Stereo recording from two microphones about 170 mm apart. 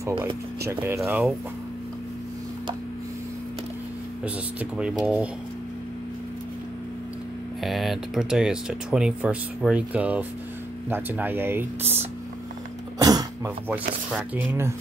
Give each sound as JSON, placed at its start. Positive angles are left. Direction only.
{"t": 0.7, "sound": "speech", "side_deg": -15}
{"t": 4.2, "sound": "speech", "side_deg": -5}
{"t": 7.6, "sound": "speech", "side_deg": 0}
{"t": 13.0, "sound": "cough", "side_deg": -20}
{"t": 13.7, "sound": "speech", "side_deg": -10}